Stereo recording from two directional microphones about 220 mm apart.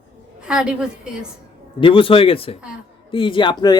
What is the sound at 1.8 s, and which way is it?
Speech, 25° left (ahead or behind).